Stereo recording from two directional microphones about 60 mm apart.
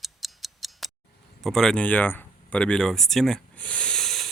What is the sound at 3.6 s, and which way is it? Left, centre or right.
Hiss, left.